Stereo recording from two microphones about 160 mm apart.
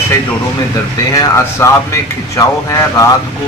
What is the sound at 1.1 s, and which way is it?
Speech, 20° left (ahead or behind).